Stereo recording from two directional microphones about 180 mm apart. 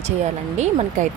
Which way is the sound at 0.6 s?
40° right (ahead or behind).